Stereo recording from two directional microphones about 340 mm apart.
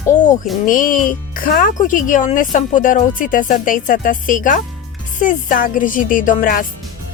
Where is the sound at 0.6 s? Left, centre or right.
Left.